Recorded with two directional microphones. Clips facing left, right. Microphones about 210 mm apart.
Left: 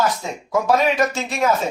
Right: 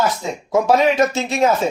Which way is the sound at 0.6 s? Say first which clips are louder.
Right 3 dB; 25° right (ahead or behind).